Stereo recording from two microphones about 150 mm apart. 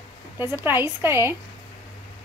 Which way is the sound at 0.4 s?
15° right (ahead or behind).